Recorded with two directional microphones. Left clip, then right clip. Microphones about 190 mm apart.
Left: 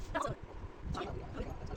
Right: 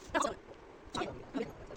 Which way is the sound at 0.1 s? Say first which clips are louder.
Right 4 dB; 50° right (ahead or behind).